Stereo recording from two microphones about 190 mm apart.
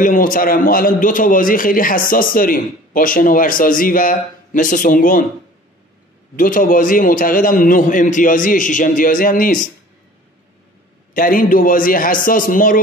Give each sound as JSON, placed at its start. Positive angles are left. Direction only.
{"t": 0.0, "sound": "a man's voice", "side_deg": 45}
{"t": 6.3, "sound": "a man's voice", "side_deg": 45}
{"t": 11.1, "sound": "a man's voice", "side_deg": 45}